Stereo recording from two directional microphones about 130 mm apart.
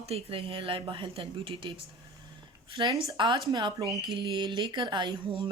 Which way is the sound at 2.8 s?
35° right (ahead or behind).